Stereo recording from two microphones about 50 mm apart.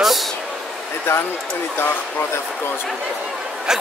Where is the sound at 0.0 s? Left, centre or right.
Centre.